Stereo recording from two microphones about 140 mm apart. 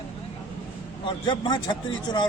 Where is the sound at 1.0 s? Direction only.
35° left (ahead or behind).